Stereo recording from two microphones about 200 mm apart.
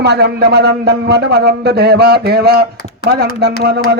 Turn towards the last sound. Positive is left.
turn(degrees=-55)  # may be behind; listen again after turning